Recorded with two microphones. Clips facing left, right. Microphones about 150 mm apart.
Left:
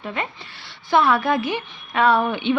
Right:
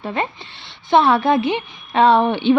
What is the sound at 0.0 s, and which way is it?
A woman's voice, 35° right (ahead or behind).